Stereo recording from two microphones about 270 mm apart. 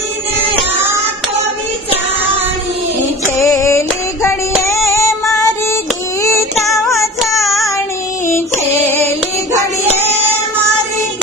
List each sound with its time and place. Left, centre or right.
3.2 s female singing: centre
4.6 s child singing: centre
6.9 s music: centre
8.3 s a sound: centre